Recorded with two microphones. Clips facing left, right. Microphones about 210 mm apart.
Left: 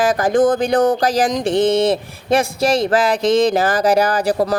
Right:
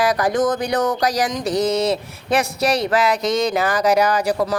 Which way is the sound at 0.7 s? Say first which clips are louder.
Left 4 dB; 30° left (ahead or behind).